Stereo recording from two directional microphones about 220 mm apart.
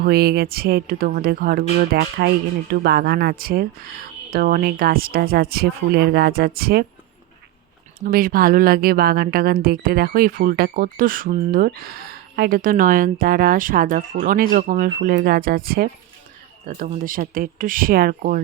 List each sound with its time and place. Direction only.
0.0 s speech: 45° right (ahead or behind)
7.9 s a woman's voice: 40° right (ahead or behind)